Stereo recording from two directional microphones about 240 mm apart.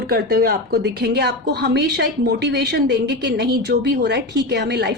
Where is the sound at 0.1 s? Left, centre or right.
Right.